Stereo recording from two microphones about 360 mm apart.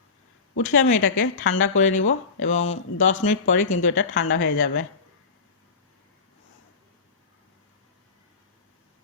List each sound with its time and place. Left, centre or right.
0.5 s speech: left